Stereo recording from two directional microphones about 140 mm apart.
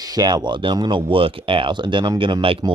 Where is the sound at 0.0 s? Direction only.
30° right (ahead or behind).